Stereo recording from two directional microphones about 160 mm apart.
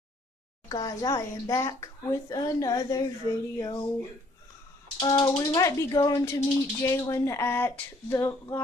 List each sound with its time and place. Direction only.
0.7 s speech: 25° left (ahead or behind)
5.2 s speech: 10° left (ahead or behind)